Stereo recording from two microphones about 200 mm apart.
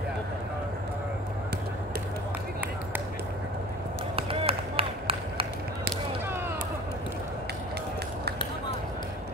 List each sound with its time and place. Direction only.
4.2 s run: 30° right (ahead or behind)